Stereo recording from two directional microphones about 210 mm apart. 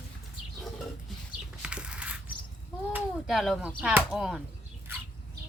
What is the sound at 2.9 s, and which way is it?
Speech, centre (ahead or behind).